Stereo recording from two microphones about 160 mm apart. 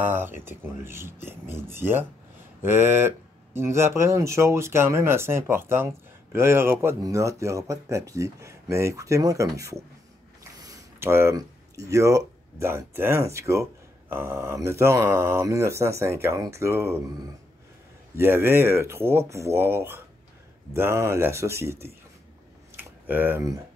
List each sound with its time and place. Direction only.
0.0 s speech: 15° right (ahead or behind)
18.1 s speech: 15° right (ahead or behind)
22.8 s a sound: 10° right (ahead or behind)